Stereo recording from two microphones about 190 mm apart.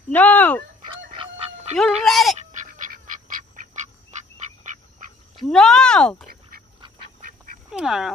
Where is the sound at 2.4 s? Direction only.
40° right (ahead or behind).